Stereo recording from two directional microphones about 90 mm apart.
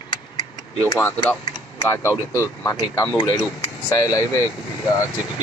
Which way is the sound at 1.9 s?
35° left (ahead or behind).